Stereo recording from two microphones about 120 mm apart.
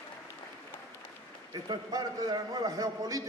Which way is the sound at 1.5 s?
35° right (ahead or behind).